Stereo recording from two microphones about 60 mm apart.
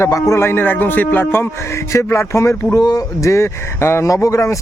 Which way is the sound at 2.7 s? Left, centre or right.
Left.